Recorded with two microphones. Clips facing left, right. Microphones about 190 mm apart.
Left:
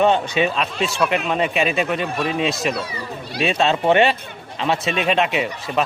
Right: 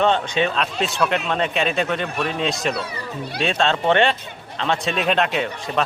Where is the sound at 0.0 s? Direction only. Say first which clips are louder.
Left 2 dB; 10° left (ahead or behind).